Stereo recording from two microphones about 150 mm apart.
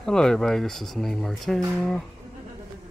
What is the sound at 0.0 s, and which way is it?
Speech, 5° left (ahead or behind).